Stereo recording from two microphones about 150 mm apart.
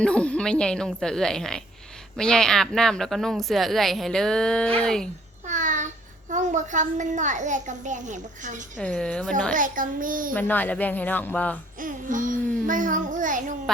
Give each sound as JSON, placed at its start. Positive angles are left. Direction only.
{"t": 0.0, "sound": "a woman's voice", "side_deg": 5}
{"t": 5.5, "sound": "a sound", "side_deg": -55}
{"t": 6.3, "sound": "a child's voice", "side_deg": -55}
{"t": 8.8, "sound": "speech", "side_deg": 10}
{"t": 9.6, "sound": "a child's voice", "side_deg": -60}
{"t": 10.3, "sound": "speech", "side_deg": 10}
{"t": 11.8, "sound": "a child's voice", "side_deg": -60}